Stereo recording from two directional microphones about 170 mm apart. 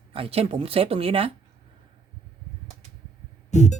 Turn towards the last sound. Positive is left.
turn(degrees=45)  # may be behind; listen again after turning